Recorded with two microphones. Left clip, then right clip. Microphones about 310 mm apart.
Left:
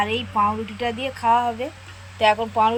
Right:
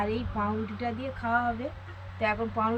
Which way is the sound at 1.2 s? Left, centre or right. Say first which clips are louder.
Left 10 dB; centre.